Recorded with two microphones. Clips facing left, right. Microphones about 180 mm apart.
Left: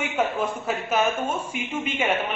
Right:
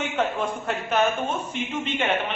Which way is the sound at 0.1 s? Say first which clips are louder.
Left 1 dB; 10° left (ahead or behind).